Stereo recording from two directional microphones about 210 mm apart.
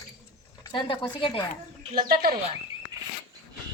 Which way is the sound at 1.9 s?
45° right (ahead or behind).